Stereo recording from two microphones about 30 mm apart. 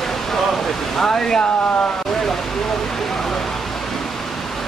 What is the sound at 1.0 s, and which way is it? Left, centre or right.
Speech, centre.